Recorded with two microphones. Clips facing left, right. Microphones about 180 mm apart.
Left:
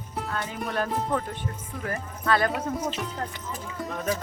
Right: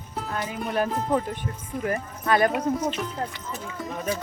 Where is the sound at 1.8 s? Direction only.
15° right (ahead or behind).